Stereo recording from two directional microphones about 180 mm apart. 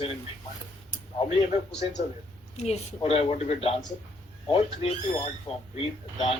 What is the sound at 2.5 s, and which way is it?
Speech, 35° left (ahead or behind).